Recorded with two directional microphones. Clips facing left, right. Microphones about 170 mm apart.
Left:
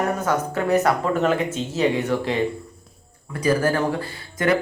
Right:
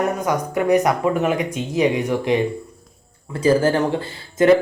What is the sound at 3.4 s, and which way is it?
Speech, 25° right (ahead or behind).